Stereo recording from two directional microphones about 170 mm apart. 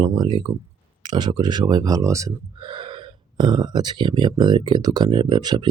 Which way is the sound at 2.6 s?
30° right (ahead or behind).